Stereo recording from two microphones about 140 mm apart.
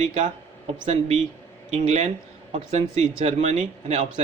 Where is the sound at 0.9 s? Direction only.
50° right (ahead or behind).